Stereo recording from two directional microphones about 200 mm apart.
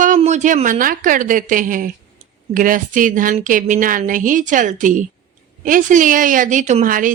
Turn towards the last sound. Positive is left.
turn(degrees=-40)  # may be behind; listen again after turning